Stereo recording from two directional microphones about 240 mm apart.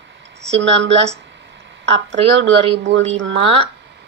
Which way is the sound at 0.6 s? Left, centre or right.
Right.